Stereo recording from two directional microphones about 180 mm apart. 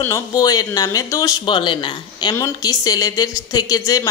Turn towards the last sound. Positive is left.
turn(degrees=20)  # may be behind; listen again after turning